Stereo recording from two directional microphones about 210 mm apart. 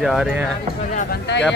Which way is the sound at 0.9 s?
45° left (ahead or behind).